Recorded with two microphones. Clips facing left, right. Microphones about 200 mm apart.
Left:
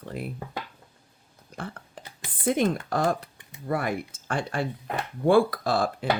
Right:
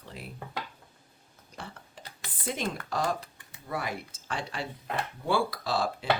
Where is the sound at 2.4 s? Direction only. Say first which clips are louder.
Left 9 dB; 50° left (ahead or behind).